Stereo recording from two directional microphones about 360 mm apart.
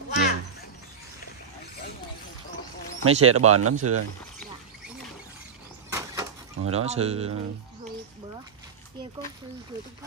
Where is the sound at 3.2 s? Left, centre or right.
Right.